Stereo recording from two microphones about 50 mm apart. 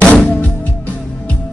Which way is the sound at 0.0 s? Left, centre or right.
Left.